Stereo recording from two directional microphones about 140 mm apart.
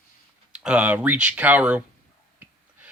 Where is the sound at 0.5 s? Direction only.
5° right (ahead or behind).